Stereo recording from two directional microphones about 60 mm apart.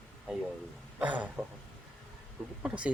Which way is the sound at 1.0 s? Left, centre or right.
Right.